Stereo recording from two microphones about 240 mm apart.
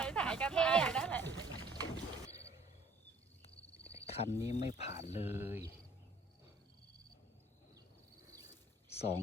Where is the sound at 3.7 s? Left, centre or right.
Left.